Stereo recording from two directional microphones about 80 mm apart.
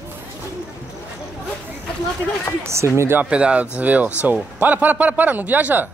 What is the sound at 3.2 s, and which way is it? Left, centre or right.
A man's voice, centre.